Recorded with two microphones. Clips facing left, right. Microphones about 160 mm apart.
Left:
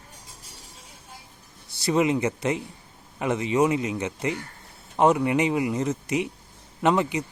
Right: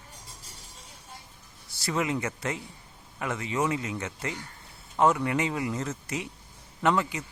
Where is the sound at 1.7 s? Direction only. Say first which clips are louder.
Left 7 dB; 20° left (ahead or behind).